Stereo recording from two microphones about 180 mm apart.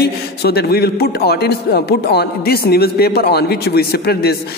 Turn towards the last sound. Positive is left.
turn(degrees=60)  # may be behind; listen again after turning